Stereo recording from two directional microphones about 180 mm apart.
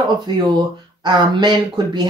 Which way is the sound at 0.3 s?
25° right (ahead or behind).